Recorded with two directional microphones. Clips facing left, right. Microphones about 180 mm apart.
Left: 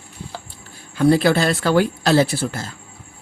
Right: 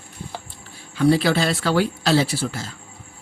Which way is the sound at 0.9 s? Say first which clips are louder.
Left 2 dB; 50° left (ahead or behind).